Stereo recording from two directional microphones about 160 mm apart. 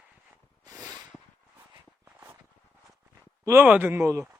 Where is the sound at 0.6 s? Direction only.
25° right (ahead or behind).